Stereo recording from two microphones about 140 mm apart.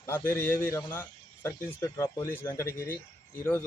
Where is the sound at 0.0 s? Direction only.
15° left (ahead or behind).